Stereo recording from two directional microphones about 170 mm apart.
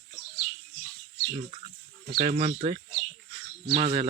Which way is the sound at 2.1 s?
45° right (ahead or behind).